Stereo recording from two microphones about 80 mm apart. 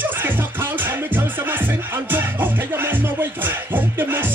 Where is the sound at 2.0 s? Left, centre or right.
Right.